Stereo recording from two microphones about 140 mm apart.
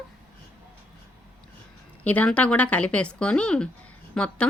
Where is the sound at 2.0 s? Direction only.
10° left (ahead or behind).